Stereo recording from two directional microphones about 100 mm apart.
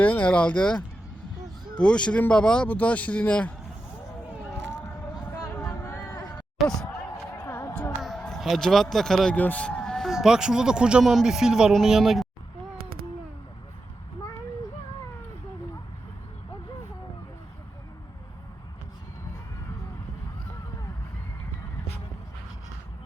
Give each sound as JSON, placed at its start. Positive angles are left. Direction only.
{"t": 0.0, "sound": "speech", "side_deg": 15}
{"t": 5.5, "sound": "a sound", "side_deg": 25}
{"t": 6.6, "sound": "speech", "side_deg": 0}
{"t": 8.0, "sound": "a man's voice", "side_deg": 5}